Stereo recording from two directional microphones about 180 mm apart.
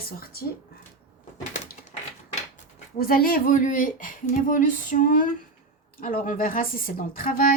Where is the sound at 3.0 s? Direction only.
55° left (ahead or behind).